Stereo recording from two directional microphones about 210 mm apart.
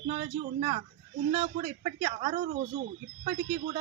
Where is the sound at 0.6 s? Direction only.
35° right (ahead or behind).